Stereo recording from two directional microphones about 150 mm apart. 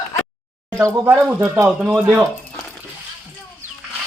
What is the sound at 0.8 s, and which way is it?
Speech, 10° right (ahead or behind).